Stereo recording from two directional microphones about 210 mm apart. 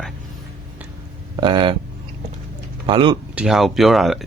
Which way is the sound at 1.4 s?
25° right (ahead or behind).